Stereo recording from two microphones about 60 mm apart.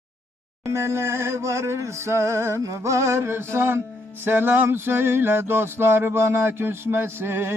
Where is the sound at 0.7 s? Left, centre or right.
Right.